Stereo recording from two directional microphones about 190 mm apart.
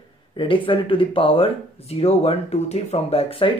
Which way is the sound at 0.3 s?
25° left (ahead or behind).